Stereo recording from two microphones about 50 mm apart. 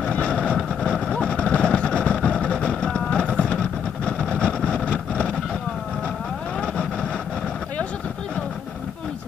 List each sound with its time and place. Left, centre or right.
0.1 s vehicle: left